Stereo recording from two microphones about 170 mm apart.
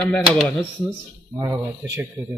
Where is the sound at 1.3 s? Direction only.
20° right (ahead or behind).